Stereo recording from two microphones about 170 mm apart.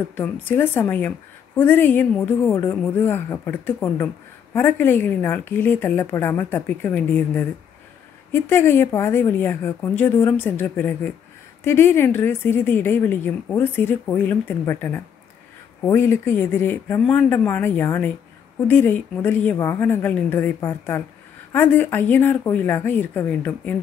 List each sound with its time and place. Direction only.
0.1 s a woman's voice: 10° left (ahead or behind)